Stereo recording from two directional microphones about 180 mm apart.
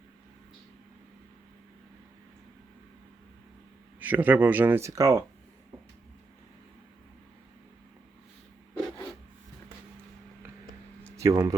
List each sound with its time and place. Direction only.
4.0 s speech: 10° right (ahead or behind)
11.2 s speech: 20° right (ahead or behind)